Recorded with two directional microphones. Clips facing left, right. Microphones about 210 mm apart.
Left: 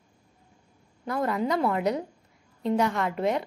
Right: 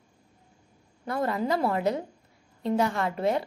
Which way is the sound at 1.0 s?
30° right (ahead or behind).